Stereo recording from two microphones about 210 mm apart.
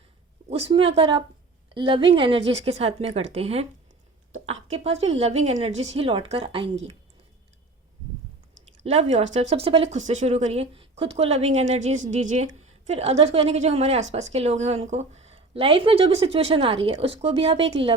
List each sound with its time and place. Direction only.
0.5 s a woman's voice: 25° right (ahead or behind)
8.8 s speech: 30° right (ahead or behind)